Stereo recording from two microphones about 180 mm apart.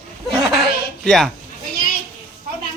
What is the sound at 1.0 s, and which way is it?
Speech, centre (ahead or behind).